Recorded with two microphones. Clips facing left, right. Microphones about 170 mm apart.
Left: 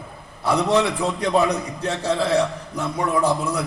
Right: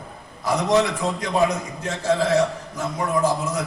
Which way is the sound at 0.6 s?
35° left (ahead or behind).